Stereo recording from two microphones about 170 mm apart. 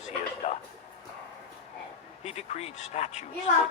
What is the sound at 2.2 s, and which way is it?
Speech, 40° left (ahead or behind).